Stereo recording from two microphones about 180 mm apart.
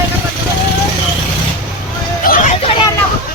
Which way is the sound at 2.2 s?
50° left (ahead or behind).